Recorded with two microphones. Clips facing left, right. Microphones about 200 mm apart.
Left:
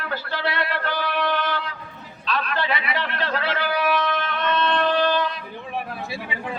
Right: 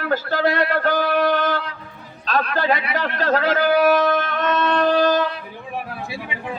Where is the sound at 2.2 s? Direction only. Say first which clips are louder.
Right 5 dB; 45° right (ahead or behind).